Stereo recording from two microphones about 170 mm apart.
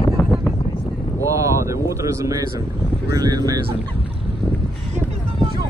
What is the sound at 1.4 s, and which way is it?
Vehicle, 15° right (ahead or behind).